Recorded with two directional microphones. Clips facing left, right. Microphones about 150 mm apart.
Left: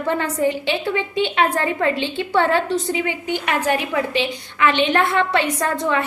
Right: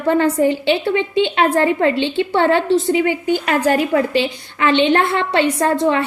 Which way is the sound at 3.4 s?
40° right (ahead or behind).